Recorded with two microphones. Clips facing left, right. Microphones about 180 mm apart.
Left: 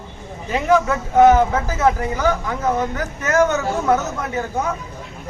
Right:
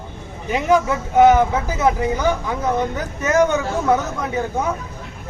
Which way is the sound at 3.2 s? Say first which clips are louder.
Right 1 dB; 15° right (ahead or behind).